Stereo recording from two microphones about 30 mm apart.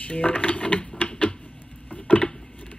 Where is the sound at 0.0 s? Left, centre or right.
Left.